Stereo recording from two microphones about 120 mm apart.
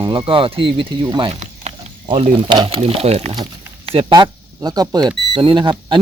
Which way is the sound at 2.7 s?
60° right (ahead or behind).